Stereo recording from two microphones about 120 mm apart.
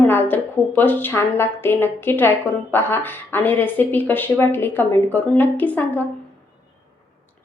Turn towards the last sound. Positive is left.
turn(degrees=15)  # may be behind; listen again after turning